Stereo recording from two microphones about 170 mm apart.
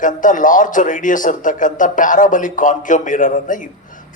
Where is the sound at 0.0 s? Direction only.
50° left (ahead or behind).